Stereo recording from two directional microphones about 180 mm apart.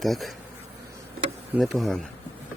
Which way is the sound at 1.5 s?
Centre (ahead or behind).